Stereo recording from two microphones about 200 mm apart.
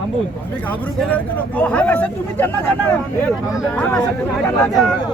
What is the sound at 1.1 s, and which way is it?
Speech, 5° left (ahead or behind).